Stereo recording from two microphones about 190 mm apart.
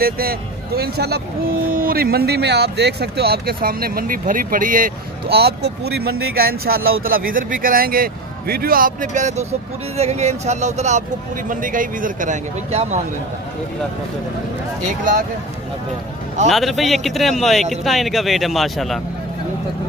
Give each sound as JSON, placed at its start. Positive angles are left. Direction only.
{"t": 0.0, "sound": "speech", "side_deg": -50}
{"t": 6.8, "sound": "speech", "side_deg": -90}
{"t": 7.1, "sound": "speech", "side_deg": -50}
{"t": 16.4, "sound": "a man's voice", "side_deg": 0}